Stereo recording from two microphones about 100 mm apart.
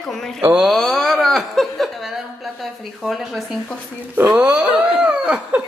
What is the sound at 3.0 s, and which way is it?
Speech, centre (ahead or behind).